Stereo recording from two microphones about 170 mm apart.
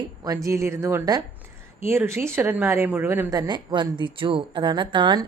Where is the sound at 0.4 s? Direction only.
15° right (ahead or behind).